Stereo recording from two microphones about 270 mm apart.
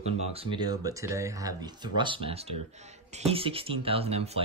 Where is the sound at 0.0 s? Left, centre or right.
Right.